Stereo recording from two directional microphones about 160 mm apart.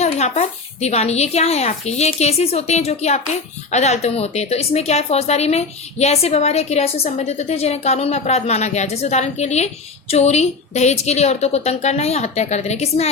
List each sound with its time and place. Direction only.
0.0 s a woman's voice: 45° left (ahead or behind)